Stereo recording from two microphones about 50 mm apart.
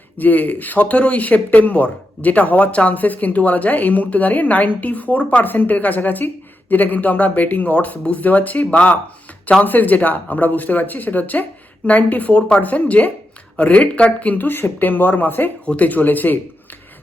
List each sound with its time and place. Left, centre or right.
0.2 s speech: left
15.6 s speech: left